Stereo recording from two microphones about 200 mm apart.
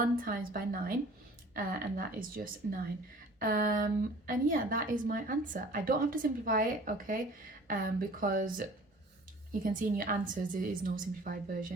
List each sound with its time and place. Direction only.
0.0 s a woman's voice: 45° right (ahead or behind)